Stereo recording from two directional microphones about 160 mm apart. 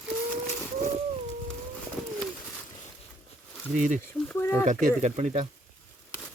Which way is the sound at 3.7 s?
50° right (ahead or behind).